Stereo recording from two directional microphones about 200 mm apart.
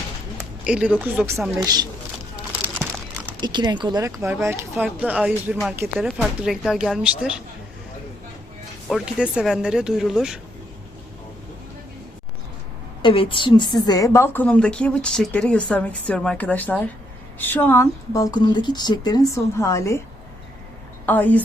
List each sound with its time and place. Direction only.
0.6 s a woman's voice: 5° right (ahead or behind)
2.5 s a sound: 5° right (ahead or behind)
3.4 s a woman's voice: 20° right (ahead or behind); by 7.3 s 5° right (ahead or behind)
8.9 s speech: centre (ahead or behind)
13.0 s a woman's voice: 25° left (ahead or behind)
21.1 s a woman's voice: 10° left (ahead or behind)